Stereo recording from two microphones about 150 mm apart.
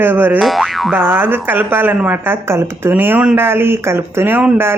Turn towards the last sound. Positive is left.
turn(degrees=-15)  # may be behind; listen again after turning